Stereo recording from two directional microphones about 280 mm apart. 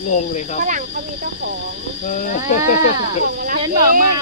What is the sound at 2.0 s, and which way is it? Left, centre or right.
Speech, left.